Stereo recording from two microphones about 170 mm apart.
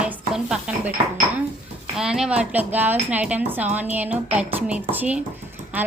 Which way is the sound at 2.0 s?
5° right (ahead or behind).